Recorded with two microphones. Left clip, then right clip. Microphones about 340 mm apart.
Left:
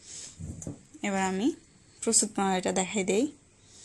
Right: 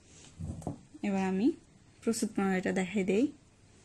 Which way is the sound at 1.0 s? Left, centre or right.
Left.